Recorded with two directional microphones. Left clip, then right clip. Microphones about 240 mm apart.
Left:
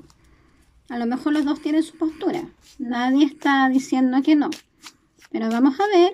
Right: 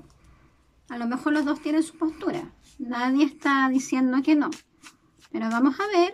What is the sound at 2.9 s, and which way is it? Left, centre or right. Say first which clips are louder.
Speech: left 4 dB; right.